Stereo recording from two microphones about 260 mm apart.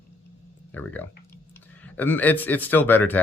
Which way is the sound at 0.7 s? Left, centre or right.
Centre.